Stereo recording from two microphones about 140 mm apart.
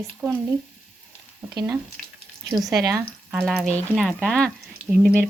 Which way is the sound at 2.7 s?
25° right (ahead or behind).